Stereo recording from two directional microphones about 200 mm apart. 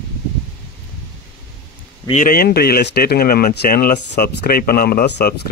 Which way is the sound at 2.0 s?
40° left (ahead or behind).